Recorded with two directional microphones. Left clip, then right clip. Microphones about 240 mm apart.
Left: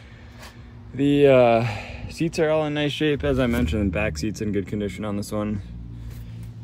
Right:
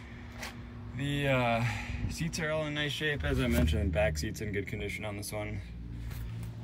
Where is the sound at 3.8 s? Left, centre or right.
Left.